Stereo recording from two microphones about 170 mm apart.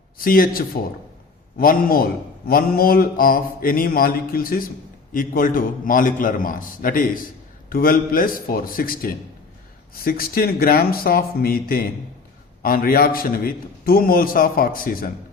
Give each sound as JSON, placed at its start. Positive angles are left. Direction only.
{"t": 0.2, "sound": "a man's voice", "side_deg": 60}